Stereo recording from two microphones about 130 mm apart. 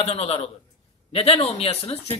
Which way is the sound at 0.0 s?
50° left (ahead or behind).